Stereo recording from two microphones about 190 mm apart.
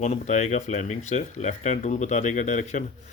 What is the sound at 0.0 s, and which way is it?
Speech, 40° left (ahead or behind).